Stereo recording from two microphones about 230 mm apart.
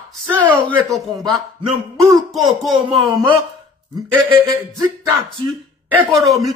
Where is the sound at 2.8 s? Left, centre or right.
Right.